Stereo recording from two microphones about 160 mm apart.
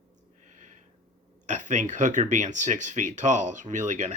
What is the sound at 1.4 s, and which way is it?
Speech, 50° right (ahead or behind).